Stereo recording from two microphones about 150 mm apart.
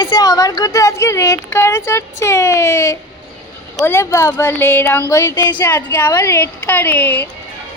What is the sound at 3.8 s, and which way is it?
A woman's voice, 15° left (ahead or behind).